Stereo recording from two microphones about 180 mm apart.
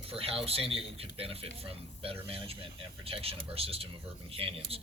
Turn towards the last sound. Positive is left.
turn(degrees=-30)  # may be behind; listen again after turning